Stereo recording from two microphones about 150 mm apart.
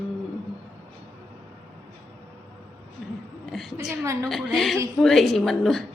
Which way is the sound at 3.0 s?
5° right (ahead or behind).